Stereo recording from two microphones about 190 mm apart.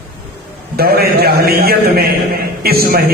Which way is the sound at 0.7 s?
55° right (ahead or behind).